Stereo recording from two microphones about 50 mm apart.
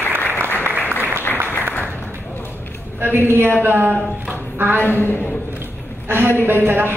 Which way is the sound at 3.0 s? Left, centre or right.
Right.